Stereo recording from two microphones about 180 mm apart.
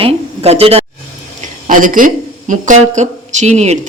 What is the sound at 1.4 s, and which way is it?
A woman's voice, 45° right (ahead or behind).